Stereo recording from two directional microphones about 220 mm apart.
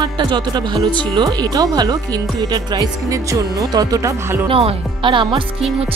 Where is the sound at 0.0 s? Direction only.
20° right (ahead or behind).